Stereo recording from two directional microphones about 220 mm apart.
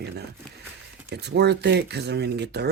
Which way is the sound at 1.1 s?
50° right (ahead or behind).